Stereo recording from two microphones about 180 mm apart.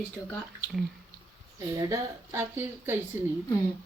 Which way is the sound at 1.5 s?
20° right (ahead or behind).